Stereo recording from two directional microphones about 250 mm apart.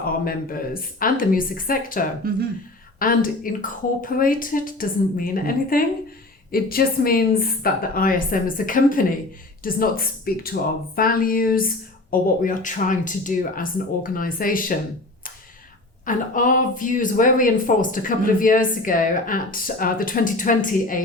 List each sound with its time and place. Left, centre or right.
0.3 s speech: left
16.0 s speech: left